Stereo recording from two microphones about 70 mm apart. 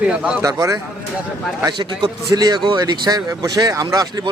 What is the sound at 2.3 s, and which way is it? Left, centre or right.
Speech, right.